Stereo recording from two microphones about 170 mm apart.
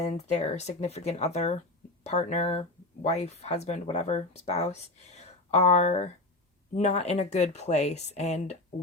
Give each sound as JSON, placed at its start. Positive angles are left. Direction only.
{"t": 0.0, "sound": "speech", "side_deg": 40}